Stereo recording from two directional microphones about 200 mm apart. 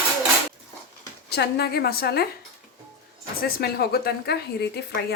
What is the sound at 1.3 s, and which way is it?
Speech, 55° left (ahead or behind).